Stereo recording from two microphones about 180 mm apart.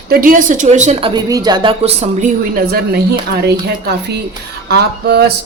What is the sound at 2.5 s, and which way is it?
Speech, 55° right (ahead or behind).